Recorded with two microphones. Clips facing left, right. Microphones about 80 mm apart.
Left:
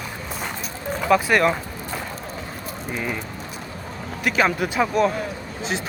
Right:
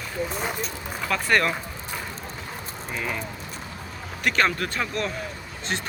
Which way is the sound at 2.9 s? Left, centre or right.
Centre.